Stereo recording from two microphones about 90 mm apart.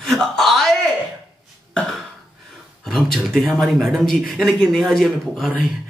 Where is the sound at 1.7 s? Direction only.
5° left (ahead or behind).